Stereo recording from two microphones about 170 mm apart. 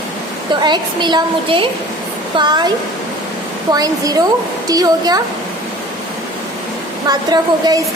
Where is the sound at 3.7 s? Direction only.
20° right (ahead or behind).